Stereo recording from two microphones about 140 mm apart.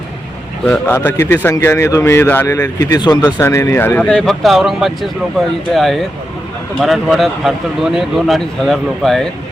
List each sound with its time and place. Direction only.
0.9 s speech: 20° left (ahead or behind)
2.6 s speech: 25° left (ahead or behind)
3.4 s speech: 20° left (ahead or behind); by 9.3 s centre (ahead or behind)